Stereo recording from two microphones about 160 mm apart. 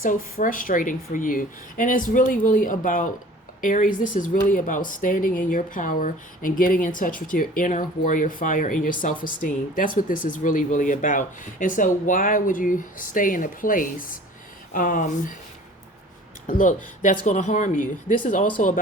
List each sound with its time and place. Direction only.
0.0 s speech: 55° left (ahead or behind)
16.5 s speech: 55° left (ahead or behind)